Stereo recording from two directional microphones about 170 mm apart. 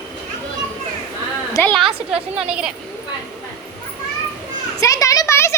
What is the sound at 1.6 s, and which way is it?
Speech, 15° left (ahead or behind).